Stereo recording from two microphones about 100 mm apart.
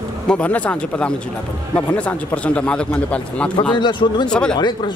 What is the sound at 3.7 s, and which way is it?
Speech, 50° left (ahead or behind).